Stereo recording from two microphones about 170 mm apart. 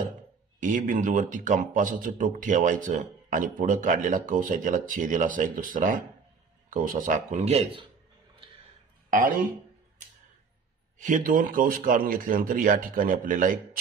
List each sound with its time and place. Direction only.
0.6 s a man's voice: 50° right (ahead or behind)
11.0 s speech: 50° right (ahead or behind)